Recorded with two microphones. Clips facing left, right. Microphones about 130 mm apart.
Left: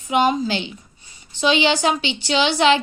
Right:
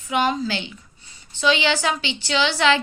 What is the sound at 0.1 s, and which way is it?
A woman's voice, 20° left (ahead or behind).